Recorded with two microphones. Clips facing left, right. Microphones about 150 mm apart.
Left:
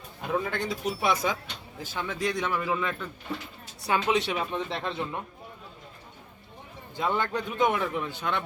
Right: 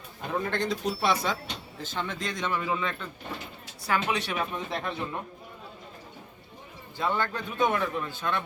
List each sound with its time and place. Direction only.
0.2 s a man's voice: 5° left (ahead or behind)
3.8 s speech: 25° left (ahead or behind)
6.9 s a man's voice: 15° left (ahead or behind)